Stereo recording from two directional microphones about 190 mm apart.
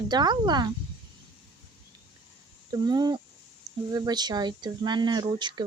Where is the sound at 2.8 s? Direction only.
20° right (ahead or behind).